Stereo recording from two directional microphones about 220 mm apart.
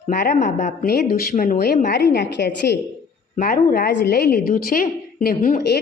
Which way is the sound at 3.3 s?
40° left (ahead or behind).